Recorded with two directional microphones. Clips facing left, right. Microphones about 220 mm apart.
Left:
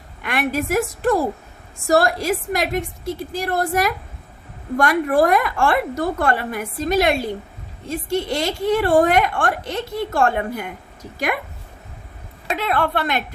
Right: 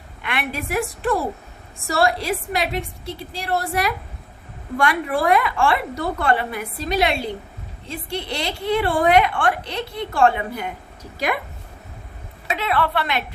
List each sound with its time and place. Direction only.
0.2 s a woman's voice: 45° left (ahead or behind)
12.5 s a woman's voice: 45° left (ahead or behind)